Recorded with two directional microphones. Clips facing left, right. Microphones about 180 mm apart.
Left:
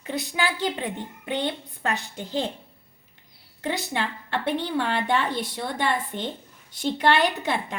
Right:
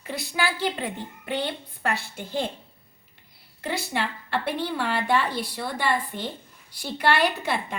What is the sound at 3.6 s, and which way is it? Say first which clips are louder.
A woman's voice: left 1 dB; 20° left (ahead or behind).